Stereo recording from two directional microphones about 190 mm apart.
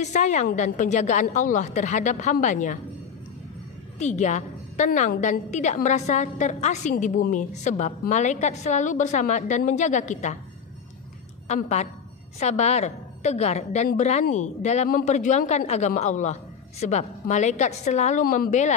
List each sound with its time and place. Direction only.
0.0 s a woman's voice: 40° left (ahead or behind)
4.0 s a woman's voice: 40° left (ahead or behind)
11.4 s a woman's voice: 35° left (ahead or behind)